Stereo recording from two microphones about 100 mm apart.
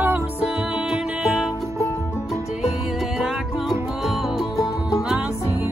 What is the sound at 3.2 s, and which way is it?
Music, centre (ahead or behind).